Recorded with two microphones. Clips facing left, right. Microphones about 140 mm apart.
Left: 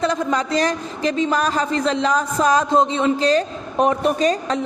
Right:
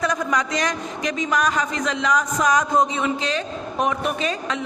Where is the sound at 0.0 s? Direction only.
30° left (ahead or behind).